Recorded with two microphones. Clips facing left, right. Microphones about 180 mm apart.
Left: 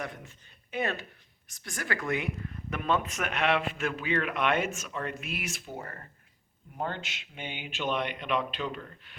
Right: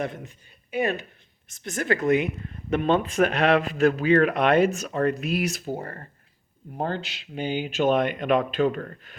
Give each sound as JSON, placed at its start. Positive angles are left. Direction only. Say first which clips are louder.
{"t": 0.0, "sound": "speech", "louder": "right 8 dB", "side_deg": -25}
{"t": 0.7, "sound": "speech", "louder": "right 6 dB", "side_deg": -15}